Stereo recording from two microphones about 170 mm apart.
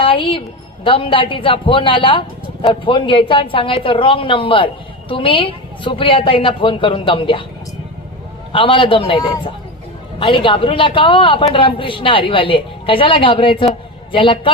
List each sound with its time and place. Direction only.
0.0 s a woman's voice: 30° left (ahead or behind)
8.5 s speech: 30° left (ahead or behind)